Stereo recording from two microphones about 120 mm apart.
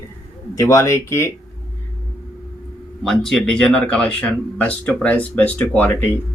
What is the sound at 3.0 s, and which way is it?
Speech, 5° left (ahead or behind).